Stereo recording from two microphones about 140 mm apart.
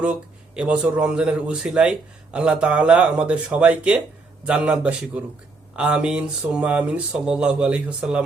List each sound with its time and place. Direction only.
0.0 s speech: 5° right (ahead or behind)